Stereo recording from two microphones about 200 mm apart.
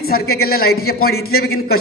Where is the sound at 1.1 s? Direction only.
90° left.